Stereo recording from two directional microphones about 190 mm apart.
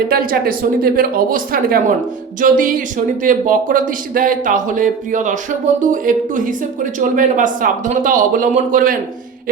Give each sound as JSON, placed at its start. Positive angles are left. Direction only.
{"t": 0.1, "sound": "speech", "side_deg": -50}